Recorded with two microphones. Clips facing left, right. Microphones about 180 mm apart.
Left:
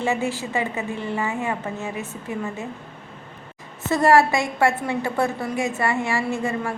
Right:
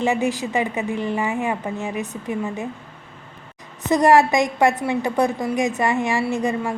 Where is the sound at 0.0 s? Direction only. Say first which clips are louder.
Right 3 dB; 15° right (ahead or behind).